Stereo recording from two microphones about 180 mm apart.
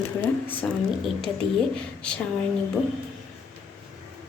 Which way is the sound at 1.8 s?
5° left (ahead or behind).